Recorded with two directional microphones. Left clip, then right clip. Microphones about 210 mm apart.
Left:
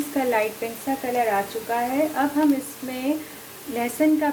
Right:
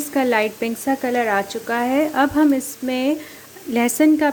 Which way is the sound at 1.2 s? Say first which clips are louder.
Right 3 dB; 45° right (ahead or behind).